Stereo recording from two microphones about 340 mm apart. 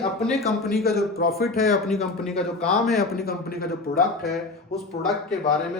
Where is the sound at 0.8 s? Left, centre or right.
Left.